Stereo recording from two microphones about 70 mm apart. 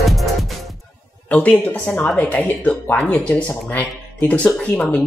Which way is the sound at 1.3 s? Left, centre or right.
Left.